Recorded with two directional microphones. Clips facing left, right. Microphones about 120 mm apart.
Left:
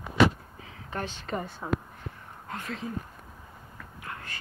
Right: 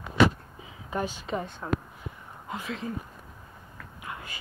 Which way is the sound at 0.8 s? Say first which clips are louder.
Right 3 dB; 10° right (ahead or behind).